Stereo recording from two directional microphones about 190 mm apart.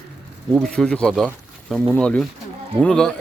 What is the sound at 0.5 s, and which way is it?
Speech, centre (ahead or behind).